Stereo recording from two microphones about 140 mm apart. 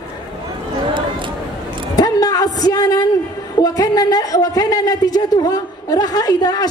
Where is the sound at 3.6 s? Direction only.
25° left (ahead or behind).